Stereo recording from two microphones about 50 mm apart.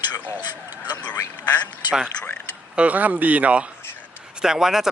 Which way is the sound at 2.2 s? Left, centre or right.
Left.